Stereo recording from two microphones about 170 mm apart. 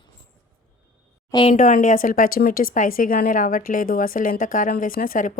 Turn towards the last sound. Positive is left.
turn(degrees=55)  # may be behind; listen again after turning